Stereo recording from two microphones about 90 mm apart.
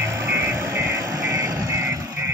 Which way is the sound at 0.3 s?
30° right (ahead or behind).